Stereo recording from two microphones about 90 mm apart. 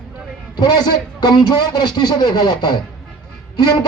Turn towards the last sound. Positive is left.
turn(degrees=50)  # may be behind; listen again after turning